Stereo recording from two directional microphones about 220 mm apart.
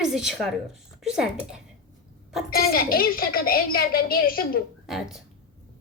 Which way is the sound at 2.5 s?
45° left (ahead or behind).